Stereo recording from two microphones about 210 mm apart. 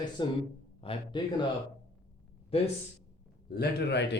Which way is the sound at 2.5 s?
30° left (ahead or behind).